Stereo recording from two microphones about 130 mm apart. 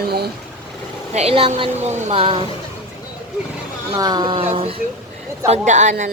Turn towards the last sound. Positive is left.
turn(degrees=-65)  # may be behind; listen again after turning